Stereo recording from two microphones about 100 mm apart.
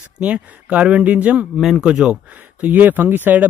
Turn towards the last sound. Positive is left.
turn(degrees=-20)  # may be behind; listen again after turning